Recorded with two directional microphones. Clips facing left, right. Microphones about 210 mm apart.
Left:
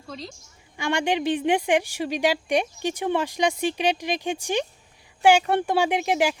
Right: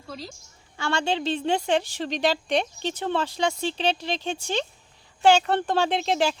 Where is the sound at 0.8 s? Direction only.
15° left (ahead or behind).